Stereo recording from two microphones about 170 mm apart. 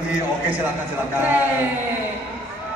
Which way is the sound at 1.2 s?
10° right (ahead or behind).